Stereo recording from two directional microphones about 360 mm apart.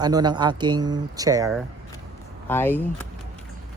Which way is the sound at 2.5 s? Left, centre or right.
Centre.